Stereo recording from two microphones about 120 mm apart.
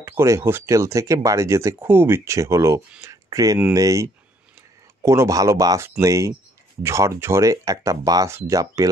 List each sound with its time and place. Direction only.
0.0 s speech: 20° right (ahead or behind)